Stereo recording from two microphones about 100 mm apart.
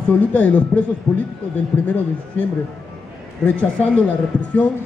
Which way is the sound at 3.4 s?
10° left (ahead or behind).